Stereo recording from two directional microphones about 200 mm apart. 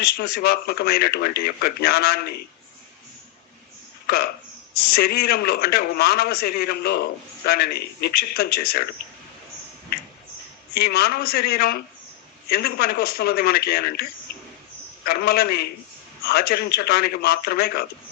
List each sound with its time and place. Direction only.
0.0 s a man's voice: 50° left (ahead or behind)
4.0 s a man's voice: 50° left (ahead or behind)
10.8 s a man's voice: 50° left (ahead or behind)
15.0 s a man's voice: 50° left (ahead or behind)